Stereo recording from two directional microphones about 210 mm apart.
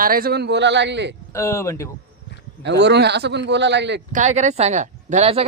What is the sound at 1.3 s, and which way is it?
Speech, 15° left (ahead or behind).